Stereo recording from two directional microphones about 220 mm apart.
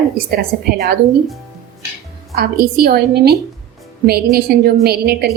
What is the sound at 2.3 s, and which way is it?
A woman's voice, 45° right (ahead or behind).